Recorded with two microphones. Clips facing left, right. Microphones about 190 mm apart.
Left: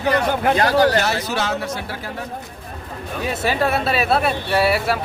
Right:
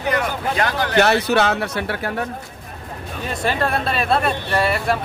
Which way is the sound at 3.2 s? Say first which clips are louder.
Left 1 dB; 5° left (ahead or behind).